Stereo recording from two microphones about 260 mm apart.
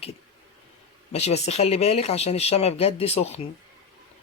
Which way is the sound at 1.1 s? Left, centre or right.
Left.